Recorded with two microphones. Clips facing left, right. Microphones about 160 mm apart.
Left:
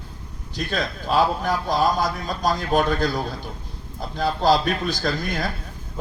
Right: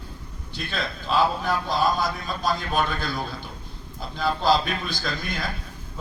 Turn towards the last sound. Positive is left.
turn(degrees=45)  # may be behind; listen again after turning